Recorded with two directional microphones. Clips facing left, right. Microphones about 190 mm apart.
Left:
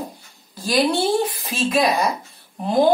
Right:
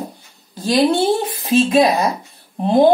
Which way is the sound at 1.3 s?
25° right (ahead or behind).